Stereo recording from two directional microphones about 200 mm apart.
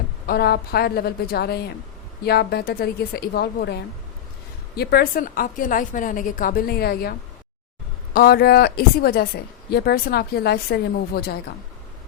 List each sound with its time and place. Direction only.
0.3 s speech: 50° left (ahead or behind)
4.8 s speech: 50° left (ahead or behind)
8.1 s speech: 50° left (ahead or behind)